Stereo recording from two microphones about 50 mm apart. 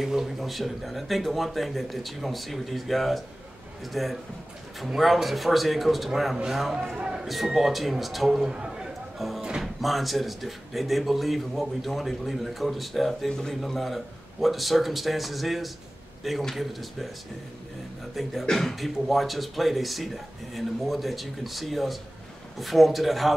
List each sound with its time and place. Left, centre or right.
0.0 s speech: centre
8.5 s a sound: centre
9.2 s speech: centre
13.3 s a man's voice: centre
13.6 s speech: centre
18.4 s speech: centre